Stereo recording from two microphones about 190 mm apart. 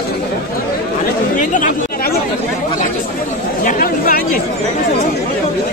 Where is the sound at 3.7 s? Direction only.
50° left (ahead or behind).